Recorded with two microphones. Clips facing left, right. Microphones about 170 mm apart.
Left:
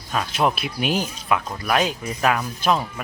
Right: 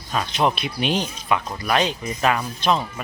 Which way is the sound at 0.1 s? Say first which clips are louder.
Even; 5° left (ahead or behind).